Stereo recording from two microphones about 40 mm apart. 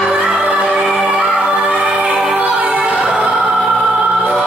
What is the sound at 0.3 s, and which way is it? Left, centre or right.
Music, right.